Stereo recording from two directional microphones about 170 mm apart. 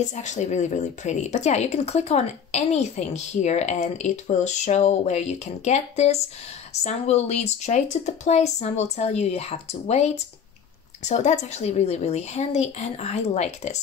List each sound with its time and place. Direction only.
0.0 s speech: 45° left (ahead or behind)